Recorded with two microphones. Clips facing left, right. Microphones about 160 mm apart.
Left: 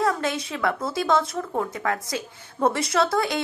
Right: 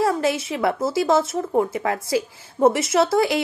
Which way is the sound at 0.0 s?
25° right (ahead or behind).